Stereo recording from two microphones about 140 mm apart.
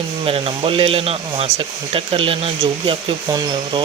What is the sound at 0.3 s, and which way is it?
Speech, 40° right (ahead or behind).